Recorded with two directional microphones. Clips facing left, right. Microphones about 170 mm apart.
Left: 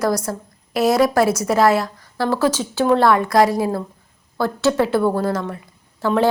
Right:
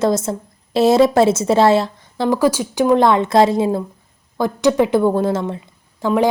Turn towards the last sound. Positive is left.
turn(degrees=-20)  # may be behind; listen again after turning